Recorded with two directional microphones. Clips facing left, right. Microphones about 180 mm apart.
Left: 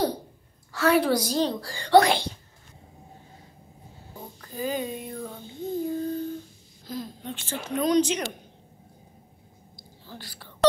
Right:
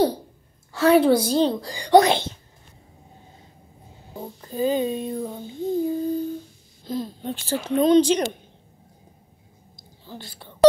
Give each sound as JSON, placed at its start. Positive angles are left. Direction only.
{"t": 0.7, "sound": "female singing", "side_deg": -25}
{"t": 4.4, "sound": "female singing", "side_deg": -25}
{"t": 6.8, "sound": "speech", "side_deg": -25}
{"t": 9.8, "sound": "a sound", "side_deg": -20}